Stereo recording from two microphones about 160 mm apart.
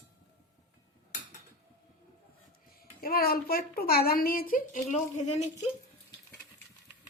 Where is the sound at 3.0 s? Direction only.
70° left (ahead or behind); by 5.2 s 50° left (ahead or behind).